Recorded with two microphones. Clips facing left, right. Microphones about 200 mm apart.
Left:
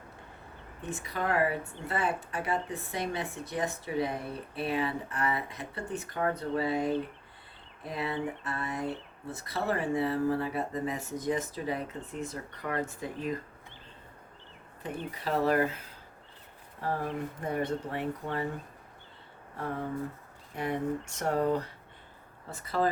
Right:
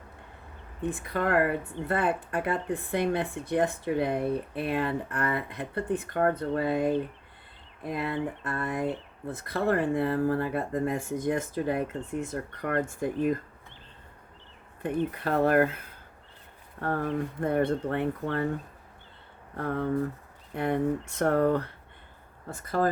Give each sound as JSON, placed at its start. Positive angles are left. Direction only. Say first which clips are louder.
{"t": 0.8, "sound": "speech", "louder": "right 5 dB", "side_deg": -55}
{"t": 14.8, "sound": "speech", "louder": "right 6 dB", "side_deg": -55}
{"t": 17.4, "sound": "speech", "louder": "right 6 dB", "side_deg": -60}
{"t": 19.5, "sound": "speech", "louder": "right 6 dB", "side_deg": -60}
{"t": 22.4, "sound": "speech", "louder": "right 3 dB", "side_deg": -50}